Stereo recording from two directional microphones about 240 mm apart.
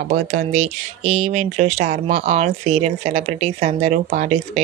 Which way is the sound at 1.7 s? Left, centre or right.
Right.